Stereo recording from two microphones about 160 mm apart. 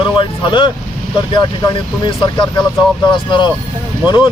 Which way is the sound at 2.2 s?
30° left (ahead or behind).